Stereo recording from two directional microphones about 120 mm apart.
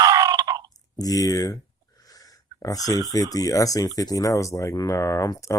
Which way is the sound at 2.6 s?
30° left (ahead or behind).